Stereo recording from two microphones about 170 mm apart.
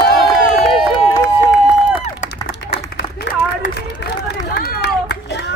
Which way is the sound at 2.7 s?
80° left.